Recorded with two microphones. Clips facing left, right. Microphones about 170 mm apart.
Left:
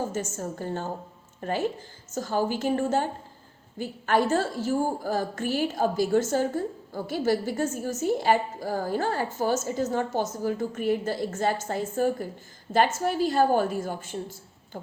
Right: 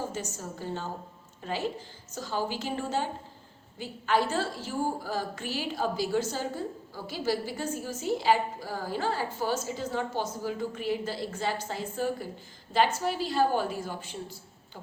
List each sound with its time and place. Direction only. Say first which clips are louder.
0.1 s a woman's voice: left 5 dB; 50° left (ahead or behind)